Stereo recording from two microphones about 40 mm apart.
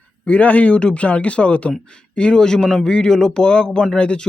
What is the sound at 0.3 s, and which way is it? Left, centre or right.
Speech, left.